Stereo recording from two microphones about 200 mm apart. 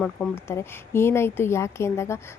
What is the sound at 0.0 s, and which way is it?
A woman's voice, 10° left (ahead or behind).